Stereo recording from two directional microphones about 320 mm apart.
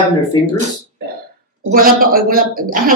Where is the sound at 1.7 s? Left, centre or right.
Right.